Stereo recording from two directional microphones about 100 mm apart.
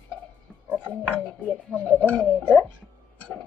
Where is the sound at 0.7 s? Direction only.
15° right (ahead or behind).